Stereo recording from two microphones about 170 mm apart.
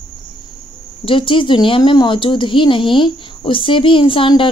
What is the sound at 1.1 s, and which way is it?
Speech, 30° left (ahead or behind).